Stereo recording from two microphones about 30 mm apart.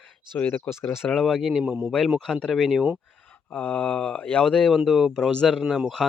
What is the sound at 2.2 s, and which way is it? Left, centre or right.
Speech, centre.